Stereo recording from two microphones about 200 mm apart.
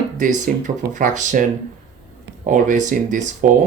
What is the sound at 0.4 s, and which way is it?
Speech, 40° right (ahead or behind).